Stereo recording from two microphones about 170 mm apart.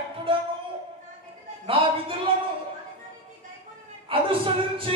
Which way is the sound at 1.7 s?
30° right (ahead or behind).